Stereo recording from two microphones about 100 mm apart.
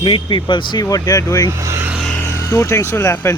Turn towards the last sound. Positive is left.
turn(degrees=25)  # may be behind; listen again after turning